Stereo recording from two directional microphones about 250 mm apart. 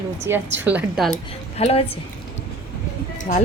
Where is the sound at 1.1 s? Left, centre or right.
Left.